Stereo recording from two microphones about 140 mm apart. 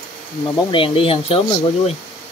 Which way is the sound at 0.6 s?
35° left (ahead or behind).